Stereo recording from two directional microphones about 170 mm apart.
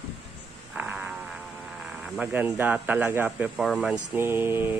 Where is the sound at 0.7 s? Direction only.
5° right (ahead or behind).